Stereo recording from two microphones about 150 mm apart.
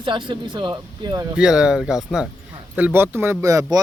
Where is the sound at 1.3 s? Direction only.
5° right (ahead or behind); by 3.8 s 20° right (ahead or behind).